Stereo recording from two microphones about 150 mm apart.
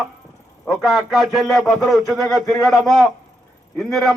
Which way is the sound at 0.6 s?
Centre (ahead or behind).